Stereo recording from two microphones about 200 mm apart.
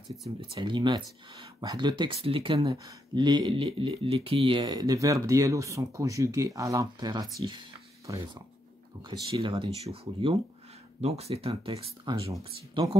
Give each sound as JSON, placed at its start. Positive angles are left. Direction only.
{"t": 0.4, "sound": "speech", "side_deg": -25}